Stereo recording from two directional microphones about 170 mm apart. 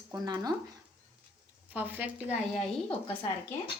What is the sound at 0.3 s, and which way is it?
Speech, 25° right (ahead or behind).